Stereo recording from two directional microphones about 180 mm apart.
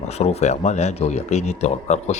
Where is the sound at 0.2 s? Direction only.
35° left (ahead or behind).